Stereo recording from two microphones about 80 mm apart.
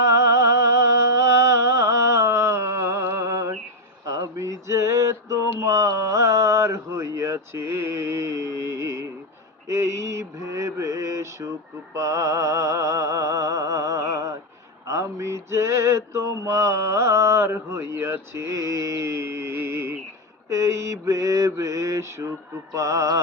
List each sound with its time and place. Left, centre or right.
0.2 s music: right
4.0 s a sound: right
9.6 s mantra: right
11.9 s music: right
14.8 s mantra: right
22.7 s music: right